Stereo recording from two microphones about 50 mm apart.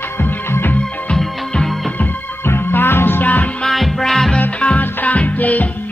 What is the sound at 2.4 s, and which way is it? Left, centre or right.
Music, left.